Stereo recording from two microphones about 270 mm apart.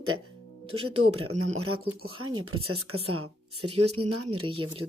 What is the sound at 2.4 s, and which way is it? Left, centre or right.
Speech, right.